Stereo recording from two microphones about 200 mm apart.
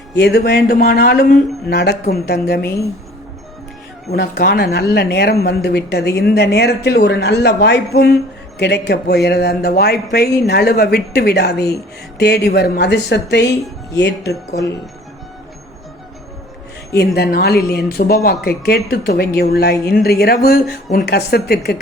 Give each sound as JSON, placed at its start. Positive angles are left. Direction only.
{"t": 0.1, "sound": "speech", "side_deg": 55}
{"t": 4.1, "sound": "speech", "side_deg": 50}
{"t": 17.2, "sound": "speech", "side_deg": 50}